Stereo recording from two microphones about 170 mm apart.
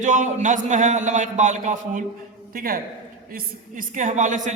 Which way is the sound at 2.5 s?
60° right (ahead or behind).